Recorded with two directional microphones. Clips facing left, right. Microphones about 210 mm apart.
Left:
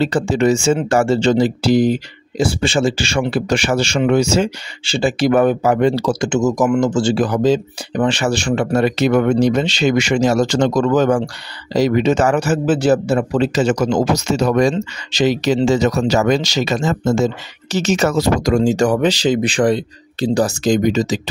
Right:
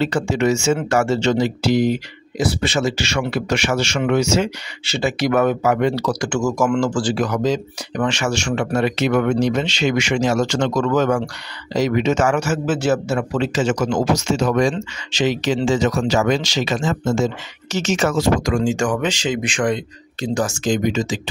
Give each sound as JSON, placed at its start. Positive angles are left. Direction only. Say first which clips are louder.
{"t": 0.0, "sound": "speech", "louder": "left 3 dB", "side_deg": 35}